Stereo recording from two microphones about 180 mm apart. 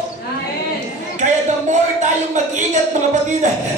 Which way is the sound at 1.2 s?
40° right (ahead or behind).